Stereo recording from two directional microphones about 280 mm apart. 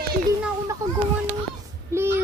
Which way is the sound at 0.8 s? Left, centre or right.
Centre.